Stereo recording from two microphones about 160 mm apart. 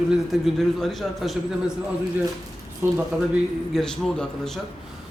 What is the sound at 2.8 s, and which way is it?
Speech, 15° right (ahead or behind).